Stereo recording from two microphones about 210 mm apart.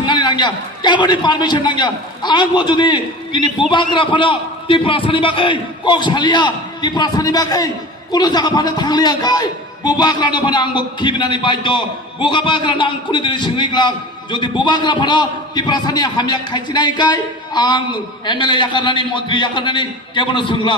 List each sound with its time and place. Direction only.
0.0 s a man's voice: 20° left (ahead or behind)